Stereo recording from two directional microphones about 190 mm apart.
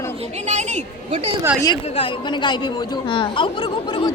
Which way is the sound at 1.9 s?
25° left (ahead or behind).